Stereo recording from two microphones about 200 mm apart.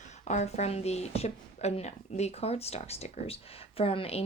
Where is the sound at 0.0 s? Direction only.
35° left (ahead or behind).